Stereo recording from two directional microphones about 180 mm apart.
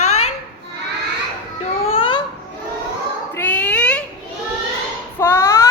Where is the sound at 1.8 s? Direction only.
30° left (ahead or behind).